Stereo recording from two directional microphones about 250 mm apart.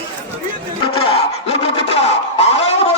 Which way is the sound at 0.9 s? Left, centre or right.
Left.